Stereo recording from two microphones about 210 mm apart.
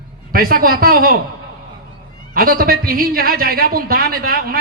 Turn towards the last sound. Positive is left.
turn(degrees=-45)  # may be behind; listen again after turning